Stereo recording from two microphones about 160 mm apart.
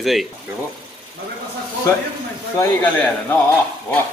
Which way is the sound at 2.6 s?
10° left (ahead or behind).